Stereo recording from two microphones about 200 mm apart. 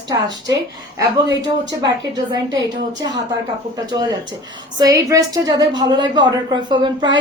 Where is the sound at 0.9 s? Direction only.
20° right (ahead or behind).